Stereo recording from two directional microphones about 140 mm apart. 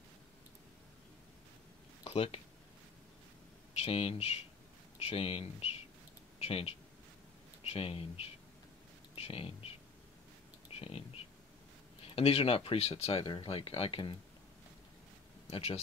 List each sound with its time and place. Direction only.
2.0 s speech: 45° left (ahead or behind)
3.7 s speech: 45° left (ahead or behind)
15.5 s speech: 45° left (ahead or behind)